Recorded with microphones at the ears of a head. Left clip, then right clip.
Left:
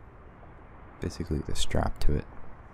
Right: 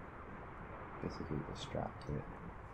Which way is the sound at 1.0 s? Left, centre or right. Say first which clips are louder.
Left 10 dB; left.